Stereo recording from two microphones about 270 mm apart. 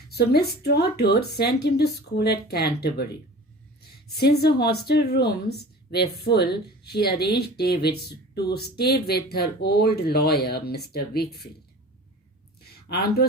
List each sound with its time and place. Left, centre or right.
0.1 s speech: left
12.9 s speech: left